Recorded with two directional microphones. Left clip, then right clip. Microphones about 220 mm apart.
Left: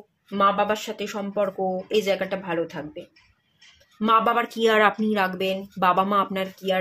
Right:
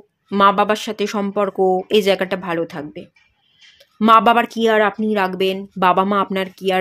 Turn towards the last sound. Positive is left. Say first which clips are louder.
# right 5 dB
turn(degrees=-40)  # may be behind; listen again after turning